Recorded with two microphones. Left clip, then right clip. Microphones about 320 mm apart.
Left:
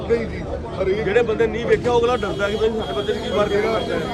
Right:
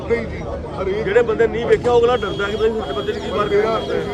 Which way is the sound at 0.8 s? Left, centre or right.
Centre.